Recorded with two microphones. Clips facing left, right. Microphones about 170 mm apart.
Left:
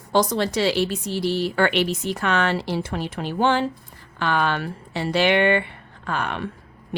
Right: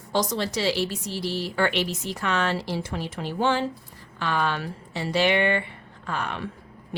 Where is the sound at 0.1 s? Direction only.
60° left (ahead or behind).